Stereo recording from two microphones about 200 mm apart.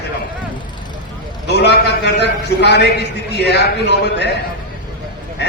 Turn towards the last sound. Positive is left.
turn(degrees=55)  # may be behind; listen again after turning